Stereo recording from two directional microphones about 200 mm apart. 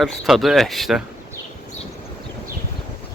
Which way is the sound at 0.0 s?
Centre (ahead or behind).